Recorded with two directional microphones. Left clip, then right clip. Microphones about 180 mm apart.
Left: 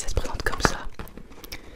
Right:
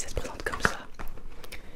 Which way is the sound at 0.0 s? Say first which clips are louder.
Left 5 dB; 35° left (ahead or behind).